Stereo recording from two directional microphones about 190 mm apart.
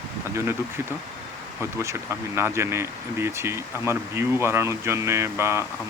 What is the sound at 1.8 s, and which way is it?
Speech, 15° right (ahead or behind).